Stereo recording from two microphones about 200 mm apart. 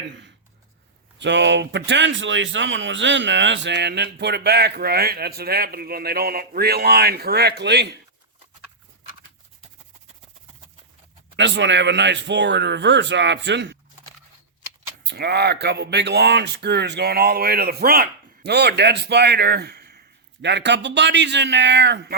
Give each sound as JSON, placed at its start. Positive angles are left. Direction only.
{"t": 1.2, "sound": "speech", "side_deg": -60}
{"t": 11.3, "sound": "speech", "side_deg": -60}
{"t": 15.0, "sound": "speech", "side_deg": -55}